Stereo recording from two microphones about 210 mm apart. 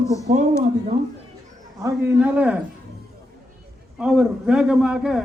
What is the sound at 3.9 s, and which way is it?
A man's voice, 5° right (ahead or behind).